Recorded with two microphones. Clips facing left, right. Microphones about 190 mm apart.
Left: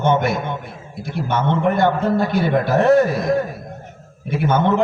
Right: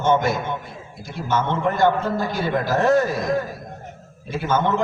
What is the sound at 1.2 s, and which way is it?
Speech, 65° left (ahead or behind).